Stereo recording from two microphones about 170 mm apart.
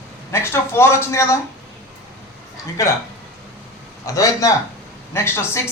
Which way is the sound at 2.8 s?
15° left (ahead or behind).